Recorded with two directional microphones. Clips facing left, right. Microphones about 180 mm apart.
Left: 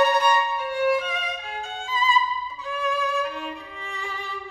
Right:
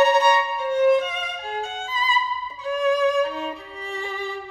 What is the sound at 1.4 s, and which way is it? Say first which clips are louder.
Violin: right 4 dB; 35° right (ahead or behind).